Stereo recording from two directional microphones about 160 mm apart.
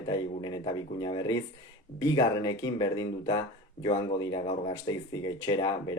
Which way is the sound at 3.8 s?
45° left (ahead or behind).